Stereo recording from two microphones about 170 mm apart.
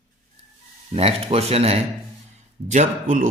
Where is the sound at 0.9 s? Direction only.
35° right (ahead or behind).